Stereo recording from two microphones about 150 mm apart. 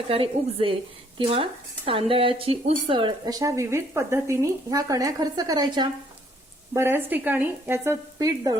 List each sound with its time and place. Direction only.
0.1 s speech: 40° right (ahead or behind)
6.7 s speech: 15° right (ahead or behind)